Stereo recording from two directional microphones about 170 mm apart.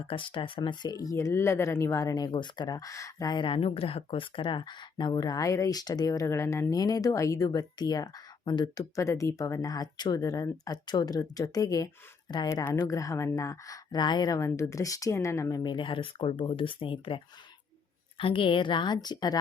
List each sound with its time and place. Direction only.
0.0 s speech: 30° left (ahead or behind)
18.2 s speech: 30° left (ahead or behind)